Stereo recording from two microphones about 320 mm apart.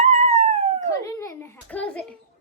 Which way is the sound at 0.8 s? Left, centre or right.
Centre.